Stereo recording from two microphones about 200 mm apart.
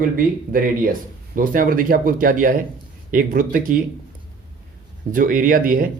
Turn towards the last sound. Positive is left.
turn(degrees=-45)  # may be behind; listen again after turning